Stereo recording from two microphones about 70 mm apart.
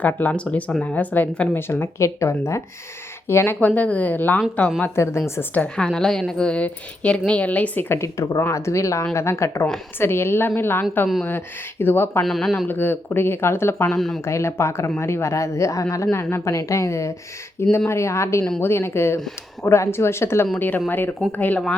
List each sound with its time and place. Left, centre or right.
0.0 s speech: left
5.0 s speech: left
5.4 s speech: left
5.7 s speech: centre
7.9 s speech: left
12.2 s speech: centre
12.6 s speech: left
16.1 s speech: left
16.5 s speech: left
20.6 s speech: left